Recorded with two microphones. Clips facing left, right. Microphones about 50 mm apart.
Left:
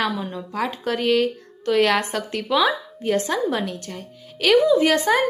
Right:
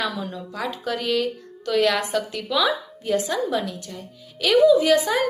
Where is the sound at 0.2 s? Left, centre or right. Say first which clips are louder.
Left 1 dB; left.